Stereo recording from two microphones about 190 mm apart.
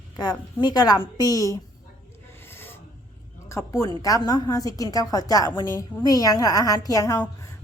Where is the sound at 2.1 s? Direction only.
10° left (ahead or behind).